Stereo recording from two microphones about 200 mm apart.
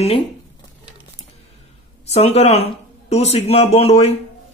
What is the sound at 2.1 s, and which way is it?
Speech, 30° left (ahead or behind).